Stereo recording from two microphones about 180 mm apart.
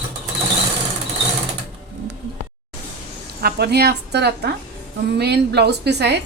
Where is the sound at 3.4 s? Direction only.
60° right (ahead or behind).